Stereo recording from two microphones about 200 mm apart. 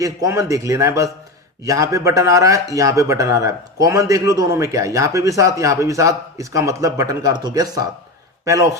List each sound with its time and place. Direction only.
0.0 s speech: 15° right (ahead or behind)